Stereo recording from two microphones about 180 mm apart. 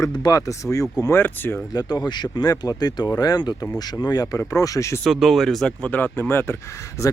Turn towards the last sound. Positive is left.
turn(degrees=15)  # may be behind; listen again after turning